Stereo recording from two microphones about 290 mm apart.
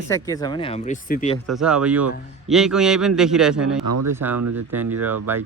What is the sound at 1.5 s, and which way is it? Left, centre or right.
Speech, centre.